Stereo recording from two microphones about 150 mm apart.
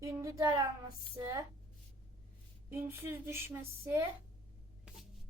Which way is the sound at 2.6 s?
15° right (ahead or behind).